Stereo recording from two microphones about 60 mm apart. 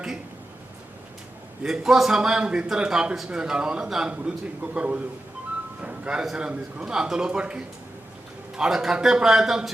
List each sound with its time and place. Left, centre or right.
1.6 s a man's voice: centre
4.1 s a man's voice: right